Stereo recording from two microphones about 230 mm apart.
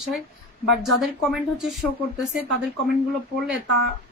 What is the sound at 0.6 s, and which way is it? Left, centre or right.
Speech, centre.